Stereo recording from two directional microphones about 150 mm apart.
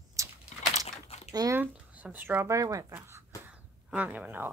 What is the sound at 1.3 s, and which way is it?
Speech, 25° right (ahead or behind).